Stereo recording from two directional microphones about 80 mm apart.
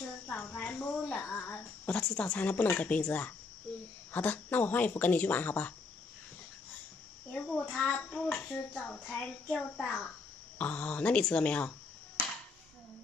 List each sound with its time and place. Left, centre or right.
0.3 s speech: left
7.3 s a sound: centre
7.7 s child singing: centre
8.8 s a child's voice: centre